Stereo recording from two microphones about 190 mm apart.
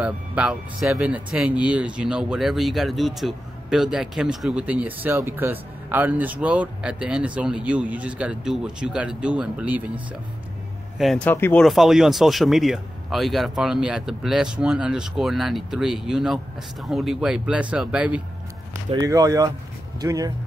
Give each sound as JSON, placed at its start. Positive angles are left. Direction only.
{"t": 0.0, "sound": "speech", "side_deg": -5}
{"t": 11.0, "sound": "speech", "side_deg": 5}
{"t": 11.6, "sound": "speech", "side_deg": 0}
{"t": 18.9, "sound": "speech", "side_deg": -20}